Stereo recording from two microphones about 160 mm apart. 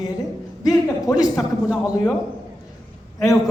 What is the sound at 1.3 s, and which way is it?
Speech, centre (ahead or behind).